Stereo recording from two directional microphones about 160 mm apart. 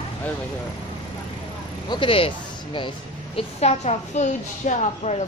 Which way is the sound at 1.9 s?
35° left (ahead or behind).